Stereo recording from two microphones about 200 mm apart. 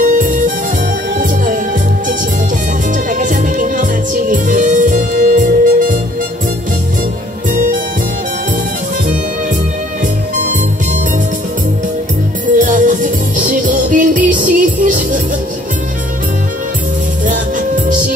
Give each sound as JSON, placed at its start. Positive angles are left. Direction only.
{"t": 0.0, "sound": "music", "side_deg": -40}
{"t": 3.1, "sound": "music", "side_deg": -40}
{"t": 7.5, "sound": "music", "side_deg": -40}
{"t": 12.5, "sound": "music", "side_deg": -40}